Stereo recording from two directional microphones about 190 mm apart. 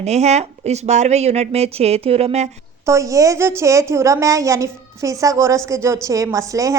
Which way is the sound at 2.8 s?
15° right (ahead or behind).